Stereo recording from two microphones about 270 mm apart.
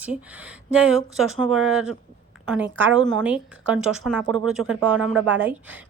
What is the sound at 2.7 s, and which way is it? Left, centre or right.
A woman's voice, centre.